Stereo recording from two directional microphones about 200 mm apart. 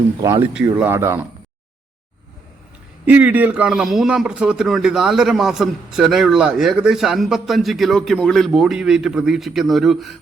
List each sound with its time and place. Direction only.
0.2 s speech: 20° right (ahead or behind)
3.1 s speech: 10° right (ahead or behind)